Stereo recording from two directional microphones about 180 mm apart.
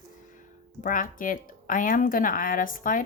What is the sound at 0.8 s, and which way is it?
Speech, 50° left (ahead or behind).